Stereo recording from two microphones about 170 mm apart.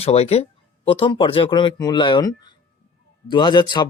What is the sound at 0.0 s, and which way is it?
Speech, 35° left (ahead or behind).